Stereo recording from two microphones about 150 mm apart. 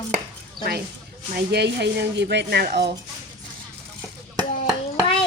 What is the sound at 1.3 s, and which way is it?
Speech, 90° right.